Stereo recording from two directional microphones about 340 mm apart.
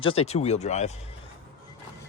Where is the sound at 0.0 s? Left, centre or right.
Centre.